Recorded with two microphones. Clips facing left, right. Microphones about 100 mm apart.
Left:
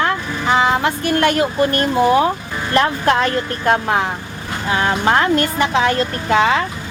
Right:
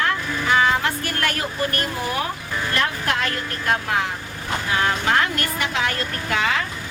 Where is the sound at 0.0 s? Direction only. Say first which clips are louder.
Left 4 dB; 25° left (ahead or behind).